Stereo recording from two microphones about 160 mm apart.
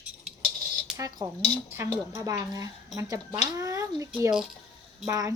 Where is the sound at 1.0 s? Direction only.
25° right (ahead or behind).